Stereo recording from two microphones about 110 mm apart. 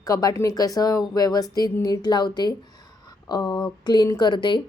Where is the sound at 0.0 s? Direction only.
35° left (ahead or behind).